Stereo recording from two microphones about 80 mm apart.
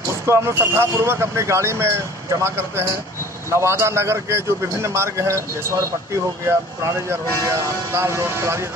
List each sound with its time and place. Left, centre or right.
0.3 s a man's voice: right